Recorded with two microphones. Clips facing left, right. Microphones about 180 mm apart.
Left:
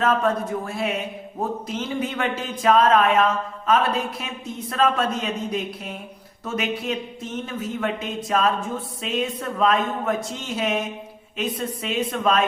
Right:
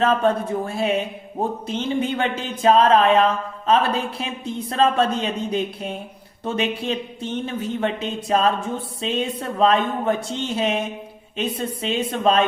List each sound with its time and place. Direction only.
0.0 s speech: 30° right (ahead or behind)